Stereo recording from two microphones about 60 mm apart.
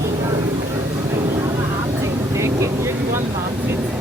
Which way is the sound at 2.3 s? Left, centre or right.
Right.